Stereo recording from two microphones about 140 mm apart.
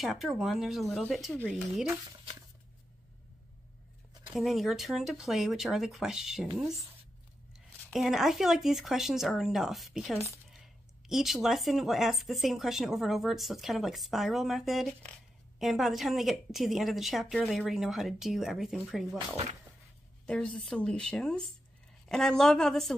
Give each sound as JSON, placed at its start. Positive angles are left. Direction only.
{"t": 0.0, "sound": "speech", "side_deg": 0}
{"t": 4.3, "sound": "speech", "side_deg": 0}
{"t": 7.5, "sound": "speech", "side_deg": 0}
{"t": 10.1, "sound": "speech", "side_deg": 20}
{"t": 10.5, "sound": "speech", "side_deg": 0}
{"t": 20.2, "sound": "speech", "side_deg": 5}